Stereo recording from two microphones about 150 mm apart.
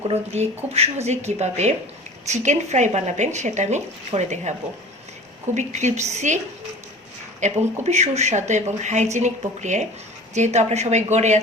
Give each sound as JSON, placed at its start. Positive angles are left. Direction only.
{"t": 0.1, "sound": "speech", "side_deg": -45}
{"t": 5.5, "sound": "speech", "side_deg": -50}
{"t": 7.4, "sound": "speech", "side_deg": -50}